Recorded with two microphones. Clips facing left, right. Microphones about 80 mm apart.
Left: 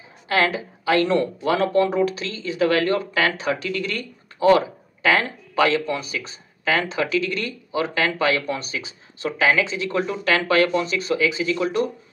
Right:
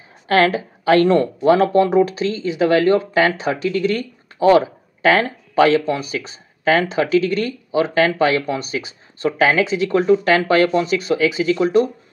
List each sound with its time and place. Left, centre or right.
0.3 s speech: right